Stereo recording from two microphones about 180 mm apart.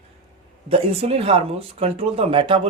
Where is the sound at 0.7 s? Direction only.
35° right (ahead or behind).